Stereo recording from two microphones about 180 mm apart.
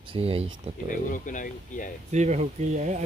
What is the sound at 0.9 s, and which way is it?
Speech, 45° left (ahead or behind).